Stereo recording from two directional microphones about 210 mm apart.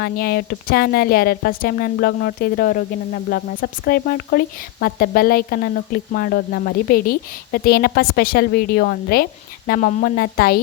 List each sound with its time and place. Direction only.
0.0 s a woman's voice: 45° left (ahead or behind)